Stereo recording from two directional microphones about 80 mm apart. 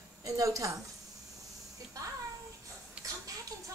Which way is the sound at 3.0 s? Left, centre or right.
Centre.